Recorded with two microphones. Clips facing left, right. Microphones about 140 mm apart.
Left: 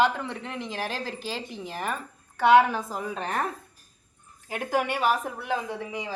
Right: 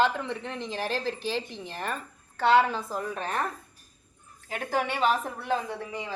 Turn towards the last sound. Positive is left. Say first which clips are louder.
# left 2 dB
turn(degrees=10)  # may be behind; listen again after turning